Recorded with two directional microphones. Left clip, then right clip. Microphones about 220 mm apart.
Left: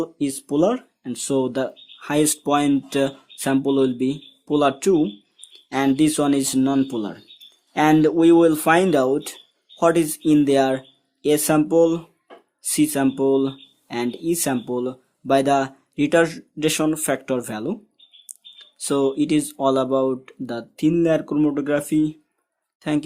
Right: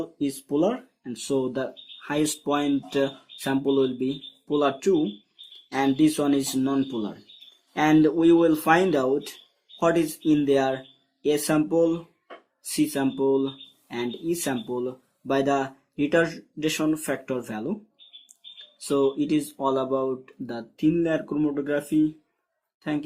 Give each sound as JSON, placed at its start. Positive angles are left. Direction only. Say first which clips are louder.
{"t": 0.0, "sound": "speech", "louder": "left 4 dB", "side_deg": 45}